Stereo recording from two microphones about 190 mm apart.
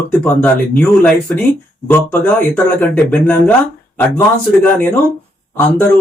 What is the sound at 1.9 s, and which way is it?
Speech, 10° left (ahead or behind).